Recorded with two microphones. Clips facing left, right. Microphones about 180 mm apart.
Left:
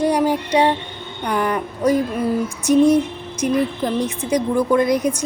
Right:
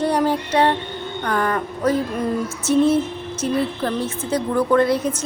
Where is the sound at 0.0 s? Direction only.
10° left (ahead or behind).